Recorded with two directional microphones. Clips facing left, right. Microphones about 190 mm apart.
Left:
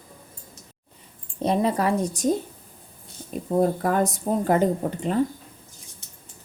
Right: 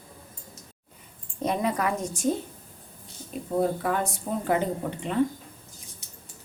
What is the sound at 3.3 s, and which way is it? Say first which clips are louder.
Speech: left 4 dB; 40° left (ahead or behind).